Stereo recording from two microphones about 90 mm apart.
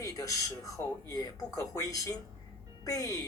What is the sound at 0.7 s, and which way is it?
Speech, 40° left (ahead or behind).